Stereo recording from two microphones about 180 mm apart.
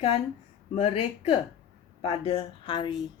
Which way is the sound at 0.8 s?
35° left (ahead or behind).